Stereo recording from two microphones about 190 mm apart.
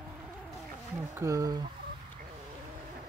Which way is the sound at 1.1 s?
15° right (ahead or behind).